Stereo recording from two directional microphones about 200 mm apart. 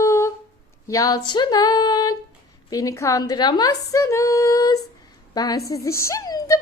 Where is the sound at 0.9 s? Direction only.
15° left (ahead or behind).